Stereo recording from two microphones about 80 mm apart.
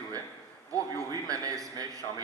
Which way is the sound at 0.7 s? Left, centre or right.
Right.